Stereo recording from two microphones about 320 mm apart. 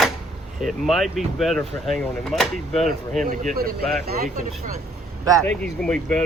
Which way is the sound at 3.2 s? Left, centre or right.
Right.